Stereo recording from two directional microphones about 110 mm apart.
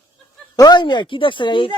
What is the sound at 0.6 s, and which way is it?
Speech, 40° left (ahead or behind).